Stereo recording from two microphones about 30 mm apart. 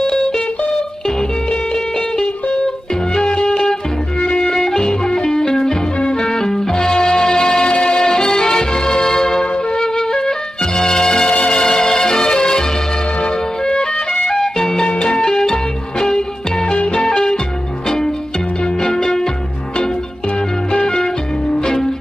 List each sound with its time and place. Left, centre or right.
0.0 s music: centre
3.2 s music: left
4.5 s music: centre
6.2 s music: left
13.2 s music: left
14.3 s music: centre
16.7 s music: left
17.1 s music: left
20.7 s music: left